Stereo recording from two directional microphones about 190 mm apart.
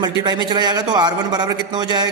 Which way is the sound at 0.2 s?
20° right (ahead or behind).